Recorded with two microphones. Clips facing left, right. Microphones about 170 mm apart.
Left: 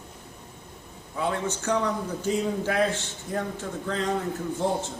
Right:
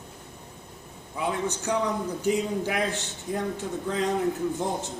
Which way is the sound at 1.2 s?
15° right (ahead or behind).